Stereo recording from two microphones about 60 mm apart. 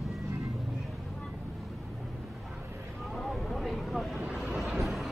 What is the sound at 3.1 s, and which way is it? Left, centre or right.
Vehicle, centre.